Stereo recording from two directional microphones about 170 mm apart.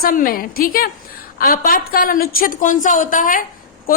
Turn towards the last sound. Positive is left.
turn(degrees=60)  # may be behind; listen again after turning